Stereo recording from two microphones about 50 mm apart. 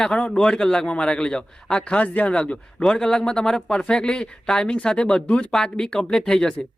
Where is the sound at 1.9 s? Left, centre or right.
Left.